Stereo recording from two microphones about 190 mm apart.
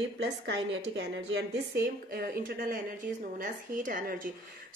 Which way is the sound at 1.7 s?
55° right (ahead or behind).